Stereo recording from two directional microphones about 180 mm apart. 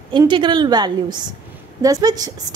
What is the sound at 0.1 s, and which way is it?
A woman's voice, 25° right (ahead or behind).